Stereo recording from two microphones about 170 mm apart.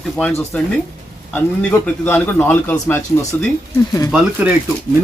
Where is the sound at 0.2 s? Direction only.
5° left (ahead or behind).